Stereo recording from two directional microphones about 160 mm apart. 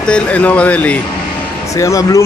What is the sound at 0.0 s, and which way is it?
Speech, 5° left (ahead or behind).